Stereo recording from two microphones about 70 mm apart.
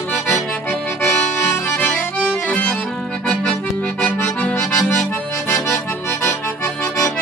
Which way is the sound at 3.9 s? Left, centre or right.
Left.